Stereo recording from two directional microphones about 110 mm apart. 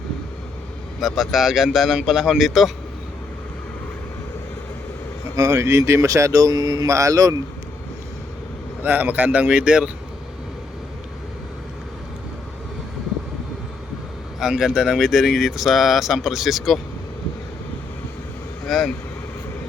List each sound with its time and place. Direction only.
0.9 s speech: centre (ahead or behind)
5.4 s speech: 25° right (ahead or behind)
8.8 s a man's voice: 15° right (ahead or behind)
14.3 s speech: 5° right (ahead or behind)